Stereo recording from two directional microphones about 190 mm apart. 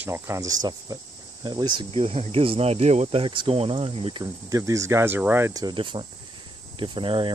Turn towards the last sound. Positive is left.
turn(degrees=-25)  # may be behind; listen again after turning